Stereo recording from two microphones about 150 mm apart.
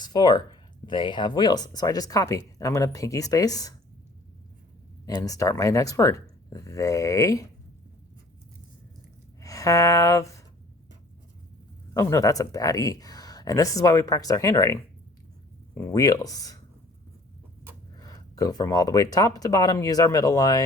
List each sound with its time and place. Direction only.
0.0 s speech: 25° left (ahead or behind)
5.0 s speech: 25° left (ahead or behind)
9.4 s speech: 20° left (ahead or behind)
11.9 s speech: 20° left (ahead or behind)
15.9 s speech: 25° left (ahead or behind)
17.9 s speech: 25° left (ahead or behind)